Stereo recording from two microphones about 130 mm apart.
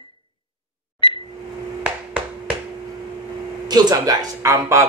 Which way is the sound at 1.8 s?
10° right (ahead or behind).